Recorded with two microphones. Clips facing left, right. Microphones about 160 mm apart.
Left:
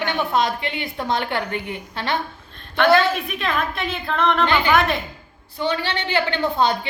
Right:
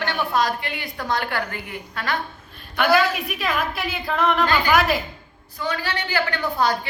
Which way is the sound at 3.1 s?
5° right (ahead or behind).